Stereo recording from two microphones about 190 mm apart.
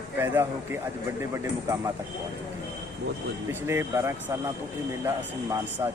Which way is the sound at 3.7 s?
15° right (ahead or behind).